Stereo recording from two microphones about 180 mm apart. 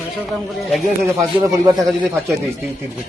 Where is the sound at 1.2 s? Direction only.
20° right (ahead or behind).